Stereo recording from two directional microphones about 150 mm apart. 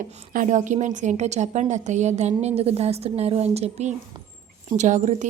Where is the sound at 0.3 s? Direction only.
60° right (ahead or behind).